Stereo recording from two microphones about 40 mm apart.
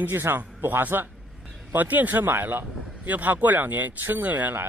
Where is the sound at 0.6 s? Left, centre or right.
Right.